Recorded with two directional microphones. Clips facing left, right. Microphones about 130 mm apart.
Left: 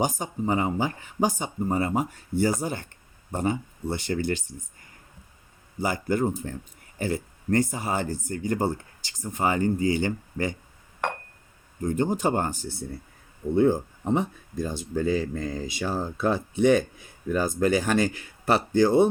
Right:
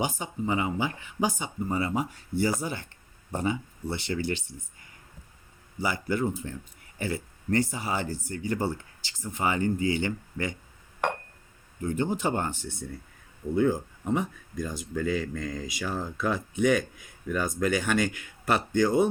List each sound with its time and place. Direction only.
0.0 s speech: 40° left (ahead or behind)
5.8 s speech: 45° left (ahead or behind)
11.8 s speech: 40° left (ahead or behind)